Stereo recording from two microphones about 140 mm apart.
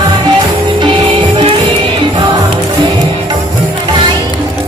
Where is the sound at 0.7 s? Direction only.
35° right (ahead or behind).